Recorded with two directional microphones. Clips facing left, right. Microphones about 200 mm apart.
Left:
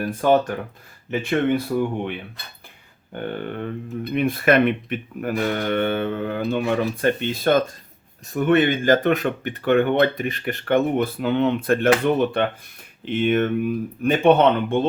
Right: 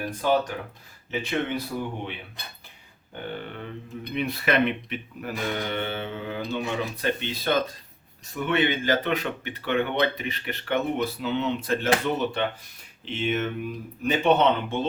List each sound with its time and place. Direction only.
0.2 s speech: 50° left (ahead or behind)
3.4 s speech: 50° left (ahead or behind)